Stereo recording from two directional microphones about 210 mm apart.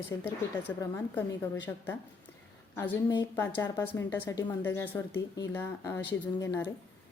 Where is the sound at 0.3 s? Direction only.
10° left (ahead or behind).